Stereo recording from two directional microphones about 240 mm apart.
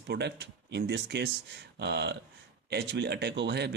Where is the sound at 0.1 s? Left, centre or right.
Right.